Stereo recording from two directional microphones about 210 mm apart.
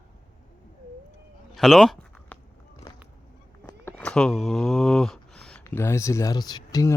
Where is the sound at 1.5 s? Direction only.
Centre (ahead or behind).